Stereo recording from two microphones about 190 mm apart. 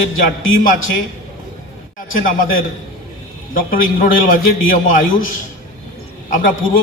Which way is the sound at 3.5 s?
45° left (ahead or behind).